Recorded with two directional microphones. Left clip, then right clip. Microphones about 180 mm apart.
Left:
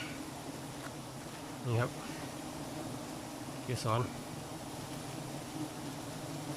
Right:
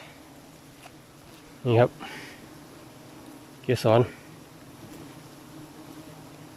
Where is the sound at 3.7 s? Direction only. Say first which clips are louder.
Right 14 dB; 55° right (ahead or behind).